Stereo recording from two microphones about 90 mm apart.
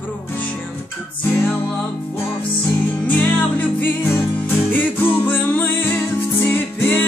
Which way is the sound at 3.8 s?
25° left (ahead or behind).